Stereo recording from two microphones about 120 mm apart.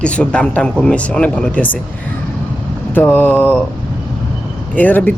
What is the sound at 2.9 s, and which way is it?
Speech, 15° left (ahead or behind).